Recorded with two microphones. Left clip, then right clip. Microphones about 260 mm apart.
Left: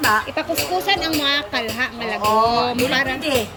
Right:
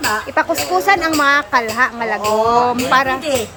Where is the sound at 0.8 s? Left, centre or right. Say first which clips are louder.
Right 8 dB; right.